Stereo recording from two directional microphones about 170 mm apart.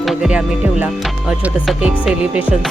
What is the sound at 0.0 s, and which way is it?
Music, centre (ahead or behind).